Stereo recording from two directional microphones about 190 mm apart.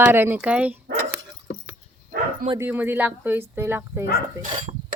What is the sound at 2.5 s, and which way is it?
Speech, 10° right (ahead or behind).